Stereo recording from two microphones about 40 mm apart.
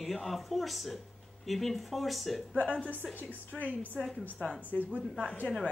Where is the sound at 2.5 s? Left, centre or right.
Left.